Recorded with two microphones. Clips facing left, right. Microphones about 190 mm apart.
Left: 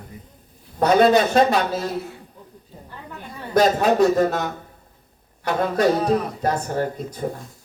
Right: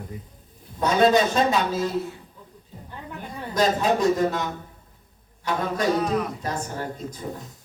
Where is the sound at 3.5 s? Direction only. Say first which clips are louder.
Left 4 dB; 60° left (ahead or behind).